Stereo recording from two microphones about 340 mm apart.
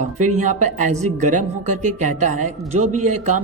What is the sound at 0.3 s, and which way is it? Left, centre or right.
A man's voice, right.